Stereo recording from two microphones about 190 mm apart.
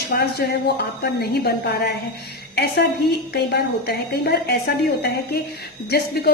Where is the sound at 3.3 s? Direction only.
60° left (ahead or behind).